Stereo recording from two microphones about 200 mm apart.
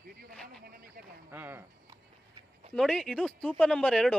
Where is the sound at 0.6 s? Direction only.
45° right (ahead or behind).